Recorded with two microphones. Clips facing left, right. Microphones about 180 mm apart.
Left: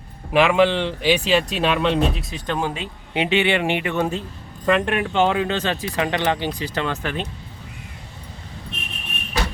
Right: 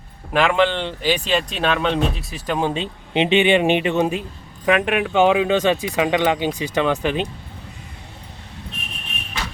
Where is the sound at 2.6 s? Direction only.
25° right (ahead or behind).